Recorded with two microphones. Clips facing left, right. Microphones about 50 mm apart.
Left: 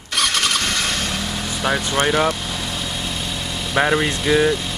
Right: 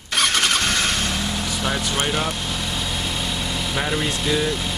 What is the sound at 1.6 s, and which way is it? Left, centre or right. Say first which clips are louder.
Speech: left 6 dB; left.